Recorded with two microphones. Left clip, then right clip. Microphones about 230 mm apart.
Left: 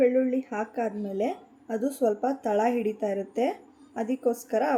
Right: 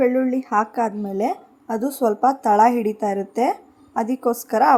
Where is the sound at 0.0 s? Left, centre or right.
Centre.